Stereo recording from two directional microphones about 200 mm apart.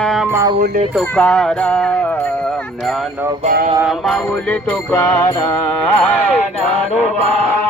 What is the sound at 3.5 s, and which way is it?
Music, 45° right (ahead or behind).